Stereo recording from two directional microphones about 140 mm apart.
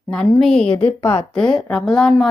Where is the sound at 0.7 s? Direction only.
40° left (ahead or behind).